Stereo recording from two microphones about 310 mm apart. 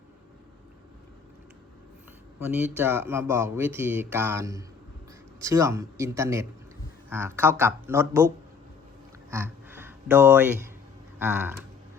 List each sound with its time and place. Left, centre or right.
2.4 s speech: centre
9.3 s a sound: centre
11.2 s speech: centre